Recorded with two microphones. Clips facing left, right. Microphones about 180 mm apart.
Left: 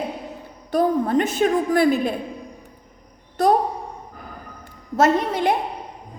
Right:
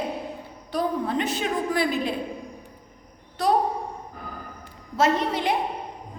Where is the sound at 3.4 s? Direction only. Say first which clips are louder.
Left 5 dB; 50° left (ahead or behind).